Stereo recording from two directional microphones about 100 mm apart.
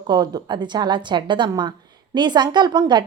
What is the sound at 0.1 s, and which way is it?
A woman's voice, 45° right (ahead or behind).